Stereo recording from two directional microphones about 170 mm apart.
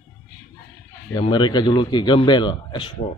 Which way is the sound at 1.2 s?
25° left (ahead or behind).